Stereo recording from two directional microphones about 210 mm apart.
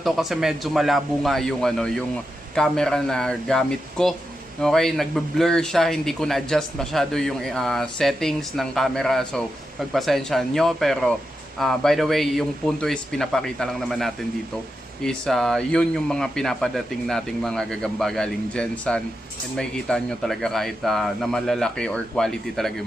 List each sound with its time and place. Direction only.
0.0 s speech: centre (ahead or behind)